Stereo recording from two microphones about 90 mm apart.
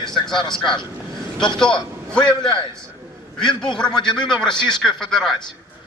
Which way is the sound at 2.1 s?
10° left (ahead or behind).